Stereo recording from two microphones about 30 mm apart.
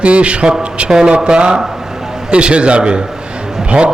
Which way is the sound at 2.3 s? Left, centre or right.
Right.